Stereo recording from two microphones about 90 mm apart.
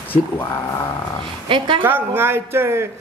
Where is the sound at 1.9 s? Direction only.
25° right (ahead or behind).